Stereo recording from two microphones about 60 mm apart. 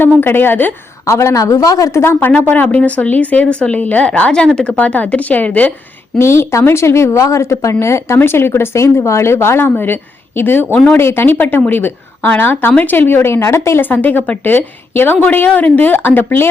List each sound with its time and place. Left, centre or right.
0.2 s a woman's voice: left
1.0 s speech: left
2.0 s a woman's voice: left; by 4.8 s centre
4.8 s speech: left
6.1 s a woman's voice: left
13.1 s a woman's voice: left
13.8 s a woman's voice: left